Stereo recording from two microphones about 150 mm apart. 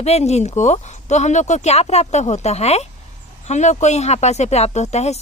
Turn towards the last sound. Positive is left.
turn(degrees=45)  # may be behind; listen again after turning